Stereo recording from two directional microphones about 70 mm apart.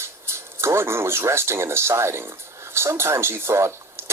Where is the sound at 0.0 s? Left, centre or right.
Right.